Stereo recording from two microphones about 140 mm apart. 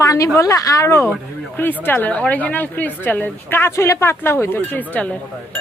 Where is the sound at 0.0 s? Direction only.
20° left (ahead or behind).